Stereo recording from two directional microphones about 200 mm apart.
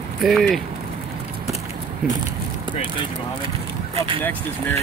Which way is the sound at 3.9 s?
25° right (ahead or behind).